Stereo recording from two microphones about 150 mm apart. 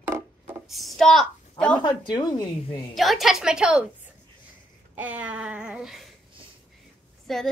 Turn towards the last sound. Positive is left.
turn(degrees=0)  # may be behind; listen again after turning